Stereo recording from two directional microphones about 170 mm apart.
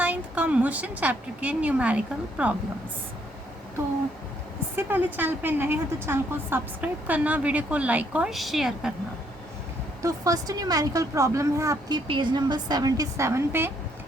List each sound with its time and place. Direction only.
0.0 s a woman's voice: 10° right (ahead or behind)
4.8 s a woman's voice: 10° right (ahead or behind)
10.0 s speech: 20° right (ahead or behind)
12.0 s speech: 30° right (ahead or behind); by 13.7 s 15° right (ahead or behind)